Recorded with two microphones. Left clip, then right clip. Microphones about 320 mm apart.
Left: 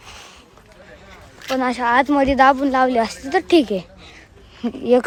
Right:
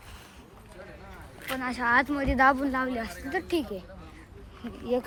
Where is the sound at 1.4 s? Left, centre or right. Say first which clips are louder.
Left 11 dB; centre.